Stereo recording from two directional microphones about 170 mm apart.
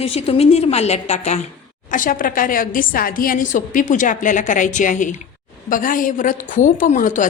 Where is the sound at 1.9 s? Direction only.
55° left (ahead or behind).